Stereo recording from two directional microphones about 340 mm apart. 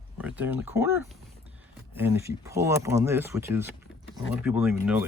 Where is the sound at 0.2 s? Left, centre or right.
Centre.